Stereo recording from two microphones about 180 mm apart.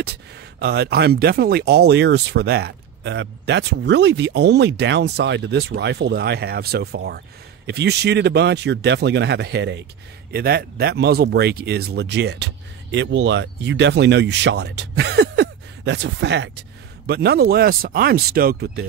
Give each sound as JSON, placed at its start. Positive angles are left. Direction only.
{"t": 0.0, "sound": "speech", "side_deg": -65}
{"t": 10.3, "sound": "speech", "side_deg": -60}
{"t": 12.9, "sound": "speech", "side_deg": -90}